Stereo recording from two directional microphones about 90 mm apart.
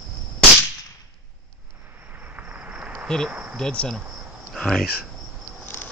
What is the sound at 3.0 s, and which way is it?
Speech, 5° left (ahead or behind).